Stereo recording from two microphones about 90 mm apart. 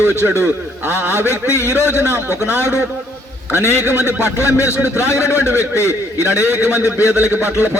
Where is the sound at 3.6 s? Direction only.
30° left (ahead or behind).